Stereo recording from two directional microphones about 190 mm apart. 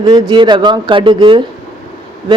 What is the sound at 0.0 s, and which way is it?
Speech, 20° right (ahead or behind).